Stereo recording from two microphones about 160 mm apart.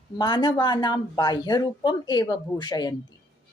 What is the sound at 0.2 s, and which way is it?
Speech, 30° left (ahead or behind).